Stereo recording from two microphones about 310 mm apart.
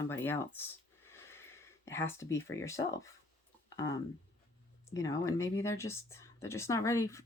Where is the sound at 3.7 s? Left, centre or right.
Centre.